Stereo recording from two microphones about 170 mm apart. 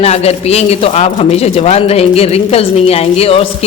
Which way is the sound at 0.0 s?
40° left (ahead or behind).